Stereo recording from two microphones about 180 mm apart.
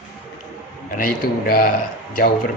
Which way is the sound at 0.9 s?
55° left (ahead or behind).